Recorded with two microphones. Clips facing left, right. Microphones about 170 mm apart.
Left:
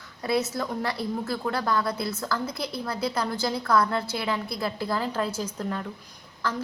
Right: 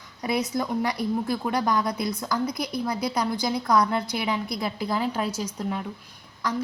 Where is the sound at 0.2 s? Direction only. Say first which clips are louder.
Even; 15° right (ahead or behind).